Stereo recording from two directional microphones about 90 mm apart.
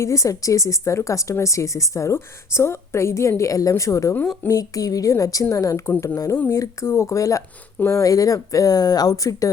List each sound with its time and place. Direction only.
0.0 s speech: 35° left (ahead or behind)
8.1 s speech: 40° left (ahead or behind)